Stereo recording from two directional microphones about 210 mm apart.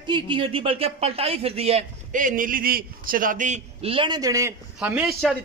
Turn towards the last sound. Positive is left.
turn(degrees=-5)  # may be behind; listen again after turning